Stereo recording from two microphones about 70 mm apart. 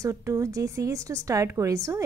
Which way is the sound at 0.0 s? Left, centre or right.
Right.